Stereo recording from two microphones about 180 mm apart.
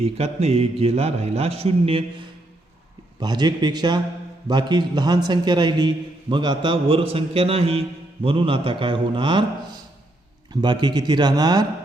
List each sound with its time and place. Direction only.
0.0 s a man's voice: 35° right (ahead or behind)
3.2 s a man's voice: 25° right (ahead or behind)
10.5 s a man's voice: 25° right (ahead or behind)